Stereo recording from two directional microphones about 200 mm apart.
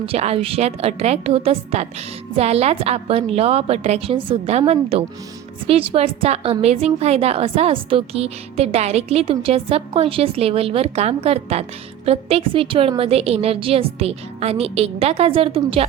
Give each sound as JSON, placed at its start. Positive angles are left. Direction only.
{"t": 0.0, "sound": "a woman's voice", "side_deg": -30}